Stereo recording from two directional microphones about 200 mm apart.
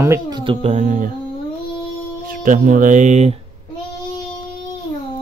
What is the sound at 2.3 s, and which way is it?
Speech, 40° right (ahead or behind).